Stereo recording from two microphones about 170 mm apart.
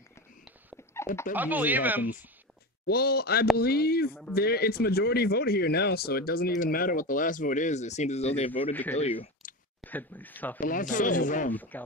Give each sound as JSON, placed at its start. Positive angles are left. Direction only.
{"t": 1.3, "sound": "speech", "side_deg": -10}
{"t": 2.9, "sound": "speech", "side_deg": 70}
{"t": 9.8, "sound": "speech", "side_deg": 10}
{"t": 10.6, "sound": "speech", "side_deg": 50}
{"t": 11.5, "sound": "speech", "side_deg": 10}